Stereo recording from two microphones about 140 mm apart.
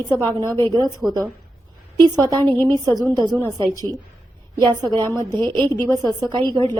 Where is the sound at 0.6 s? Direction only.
30° right (ahead or behind).